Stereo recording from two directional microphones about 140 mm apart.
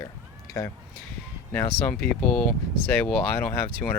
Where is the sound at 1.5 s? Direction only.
15° left (ahead or behind).